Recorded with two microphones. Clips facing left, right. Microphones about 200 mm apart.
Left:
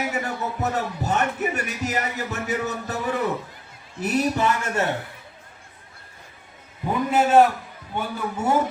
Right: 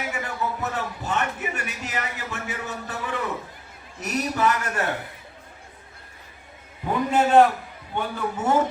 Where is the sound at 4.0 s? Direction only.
30° left (ahead or behind).